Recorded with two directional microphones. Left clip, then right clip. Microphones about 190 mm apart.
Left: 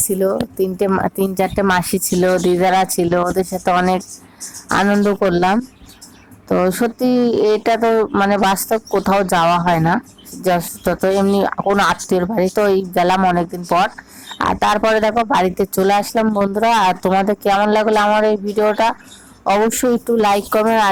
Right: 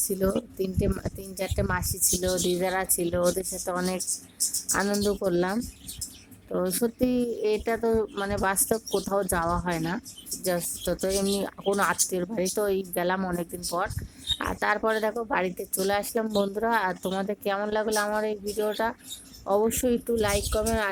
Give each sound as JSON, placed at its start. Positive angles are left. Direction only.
{"t": 0.1, "sound": "a woman's voice", "side_deg": 20}
{"t": 6.6, "sound": "a woman's voice", "side_deg": 20}